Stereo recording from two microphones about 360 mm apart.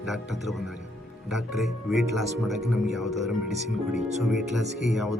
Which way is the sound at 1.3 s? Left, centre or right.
Centre.